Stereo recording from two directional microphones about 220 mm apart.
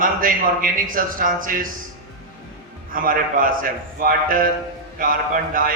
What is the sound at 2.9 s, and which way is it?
A man's voice, 40° right (ahead or behind).